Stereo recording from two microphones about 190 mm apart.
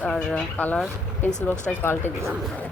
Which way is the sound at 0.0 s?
5° left (ahead or behind).